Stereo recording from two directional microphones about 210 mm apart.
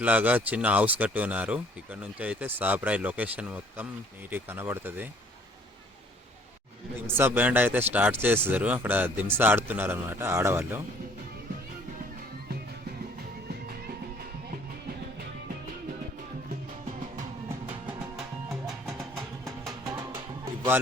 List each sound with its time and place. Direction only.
0.0 s speech: 5° right (ahead or behind)
7.1 s speech: 10° right (ahead or behind)
18.6 s music: centre (ahead or behind)
19.5 s music: 15° right (ahead or behind)